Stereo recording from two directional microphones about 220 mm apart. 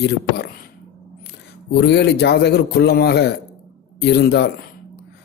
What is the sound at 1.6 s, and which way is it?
Speech, 50° left (ahead or behind).